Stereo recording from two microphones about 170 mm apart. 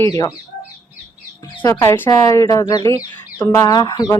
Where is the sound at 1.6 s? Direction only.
20° left (ahead or behind).